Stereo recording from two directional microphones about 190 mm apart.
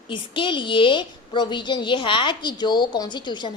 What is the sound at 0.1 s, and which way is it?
A woman's voice, 25° left (ahead or behind).